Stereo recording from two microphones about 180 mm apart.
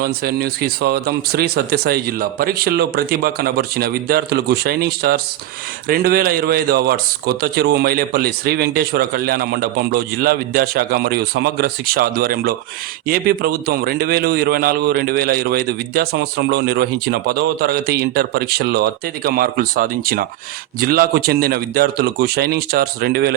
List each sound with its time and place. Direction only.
0.0 s a man's voice: 60° right (ahead or behind)